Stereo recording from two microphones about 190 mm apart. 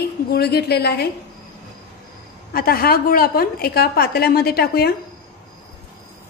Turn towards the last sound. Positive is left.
turn(degrees=55)  # may be behind; listen again after turning